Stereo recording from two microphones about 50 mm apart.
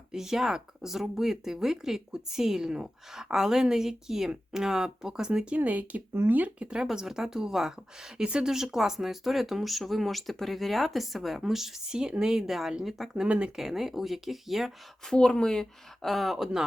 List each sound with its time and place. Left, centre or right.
0.1 s speech: centre
5.5 s speech: right
6.6 s speech: centre
13.2 s speech: right
13.6 s speech: centre
15.0 s speech: centre